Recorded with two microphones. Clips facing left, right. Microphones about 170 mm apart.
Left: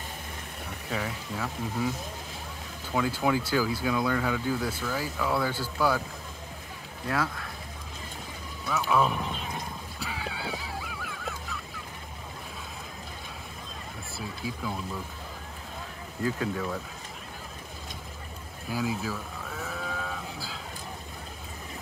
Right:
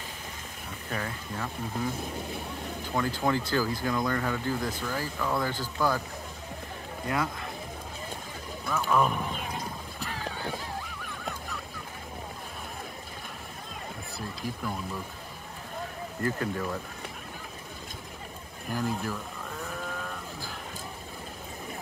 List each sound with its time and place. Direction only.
0.8 s speech: 10° left (ahead or behind)
2.9 s speech: 5° left (ahead or behind)
8.6 s speech: 5° left (ahead or behind)
10.1 s honk: 10° left (ahead or behind)
14.1 s speech: 5° left (ahead or behind)
16.2 s speech: 5° left (ahead or behind)
18.7 s sheep: 5° left (ahead or behind)